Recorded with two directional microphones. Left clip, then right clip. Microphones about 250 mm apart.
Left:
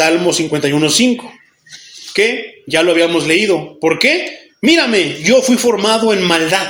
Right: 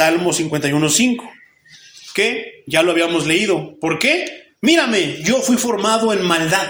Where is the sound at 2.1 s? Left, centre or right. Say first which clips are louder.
Left 4 dB; centre.